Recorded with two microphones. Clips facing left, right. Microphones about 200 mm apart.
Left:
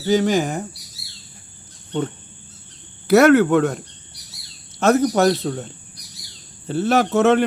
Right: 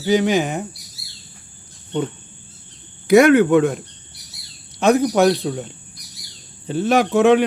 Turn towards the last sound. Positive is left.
turn(degrees=-15)  # may be behind; listen again after turning